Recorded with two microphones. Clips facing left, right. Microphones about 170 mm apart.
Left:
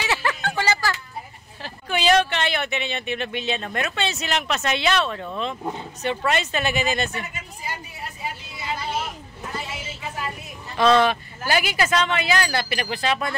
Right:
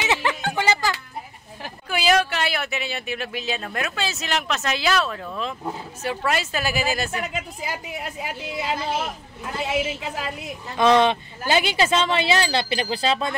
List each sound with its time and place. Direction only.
0.0 s music: 20° right (ahead or behind)
1.6 s speech: 5° right (ahead or behind)
7.1 s a woman's voice: 90° right
10.8 s speech: 15° right (ahead or behind)